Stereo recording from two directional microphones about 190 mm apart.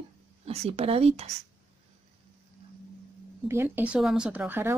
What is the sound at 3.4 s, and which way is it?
Speech, 15° right (ahead or behind).